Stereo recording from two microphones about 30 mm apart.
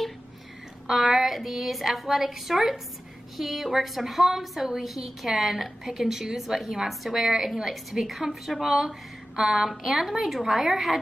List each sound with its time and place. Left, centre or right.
0.8 s a woman's voice: centre